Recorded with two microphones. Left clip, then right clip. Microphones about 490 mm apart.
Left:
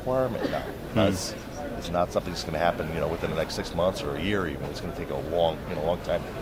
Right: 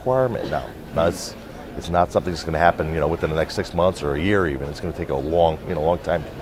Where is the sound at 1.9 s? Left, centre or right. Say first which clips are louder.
Right 8 dB; right.